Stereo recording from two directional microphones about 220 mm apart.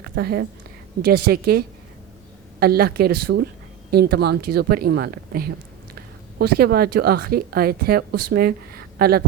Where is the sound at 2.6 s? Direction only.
45° right (ahead or behind).